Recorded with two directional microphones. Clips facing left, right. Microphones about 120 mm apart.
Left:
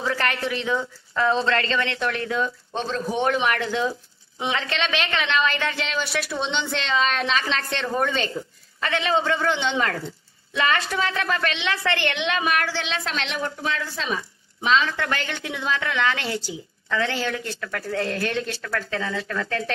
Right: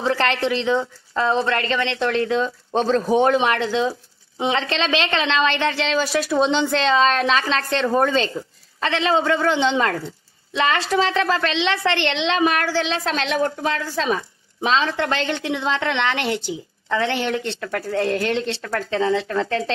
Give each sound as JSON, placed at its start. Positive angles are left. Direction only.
{"t": 0.0, "sound": "a woman's voice", "side_deg": -25}